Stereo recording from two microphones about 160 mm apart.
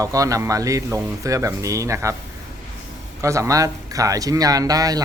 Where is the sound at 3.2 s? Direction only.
20° right (ahead or behind).